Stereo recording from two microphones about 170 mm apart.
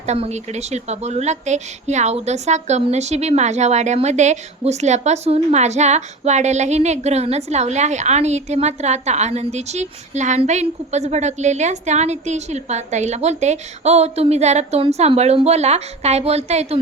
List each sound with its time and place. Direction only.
0.0 s a woman's voice: 40° right (ahead or behind)